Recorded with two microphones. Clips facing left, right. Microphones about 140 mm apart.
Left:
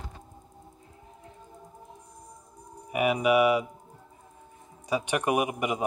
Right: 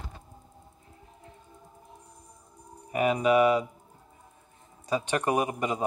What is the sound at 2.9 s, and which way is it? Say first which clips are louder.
Speech: even; 10° left (ahead or behind).